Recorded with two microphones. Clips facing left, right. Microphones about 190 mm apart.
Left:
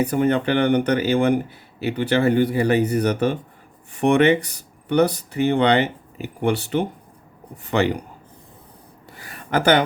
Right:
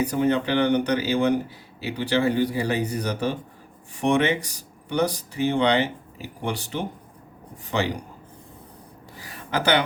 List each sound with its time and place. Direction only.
0.0 s speech: 55° left (ahead or behind)
9.1 s speech: 55° left (ahead or behind)